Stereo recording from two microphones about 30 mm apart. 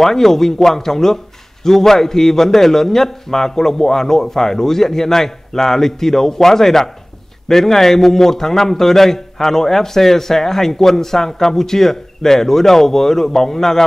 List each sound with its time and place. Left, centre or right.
0.0 s speech: centre